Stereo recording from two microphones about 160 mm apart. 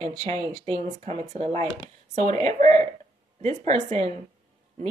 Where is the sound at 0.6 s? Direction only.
40° right (ahead or behind).